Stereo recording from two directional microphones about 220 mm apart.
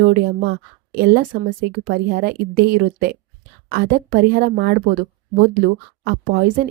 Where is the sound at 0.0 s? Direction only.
45° right (ahead or behind).